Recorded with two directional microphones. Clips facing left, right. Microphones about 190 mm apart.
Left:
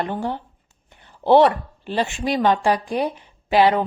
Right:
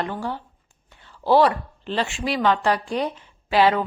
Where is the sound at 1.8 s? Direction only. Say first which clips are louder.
Left 2 dB; 15° left (ahead or behind).